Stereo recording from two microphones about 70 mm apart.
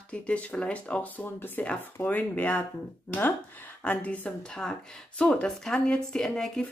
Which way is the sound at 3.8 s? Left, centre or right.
Left.